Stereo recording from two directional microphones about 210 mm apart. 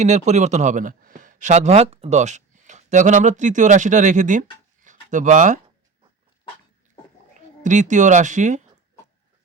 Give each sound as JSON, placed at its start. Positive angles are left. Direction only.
{"t": 0.0, "sound": "speech", "side_deg": -35}
{"t": 7.6, "sound": "speech", "side_deg": -35}